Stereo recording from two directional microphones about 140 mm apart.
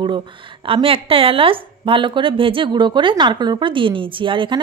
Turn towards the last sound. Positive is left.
turn(degrees=-35)  # may be behind; listen again after turning